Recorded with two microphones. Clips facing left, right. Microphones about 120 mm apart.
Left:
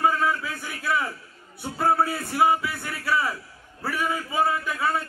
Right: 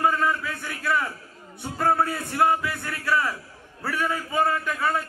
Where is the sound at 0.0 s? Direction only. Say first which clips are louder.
Even; 5° left (ahead or behind).